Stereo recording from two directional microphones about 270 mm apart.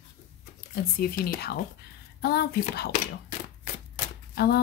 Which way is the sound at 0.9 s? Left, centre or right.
Left.